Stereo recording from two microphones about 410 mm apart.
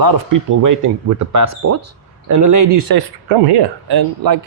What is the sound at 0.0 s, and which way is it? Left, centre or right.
Speech, right.